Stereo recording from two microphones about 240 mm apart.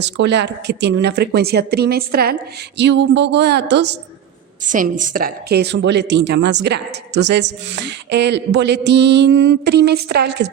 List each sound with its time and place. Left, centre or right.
0.0 s a woman's voice: right
4.6 s a woman's voice: right